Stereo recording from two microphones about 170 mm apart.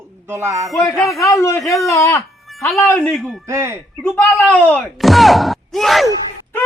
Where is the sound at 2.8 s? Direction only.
10° left (ahead or behind).